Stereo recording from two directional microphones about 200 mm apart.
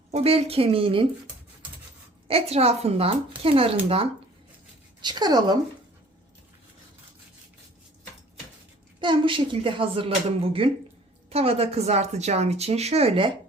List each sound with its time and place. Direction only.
0.1 s speech: 30° right (ahead or behind)
2.2 s speech: 30° right (ahead or behind)
5.0 s speech: 20° right (ahead or behind)
9.0 s a woman's voice: 25° right (ahead or behind)